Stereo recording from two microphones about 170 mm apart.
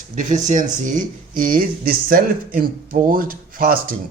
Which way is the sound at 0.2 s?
50° right (ahead or behind).